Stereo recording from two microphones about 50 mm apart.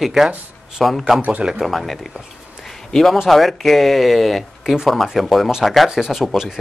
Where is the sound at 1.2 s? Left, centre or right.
Right.